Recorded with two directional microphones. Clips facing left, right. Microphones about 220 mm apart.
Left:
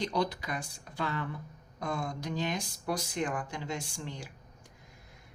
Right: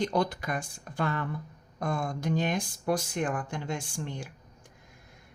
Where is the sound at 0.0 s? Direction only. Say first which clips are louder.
Right 3 dB; 50° right (ahead or behind).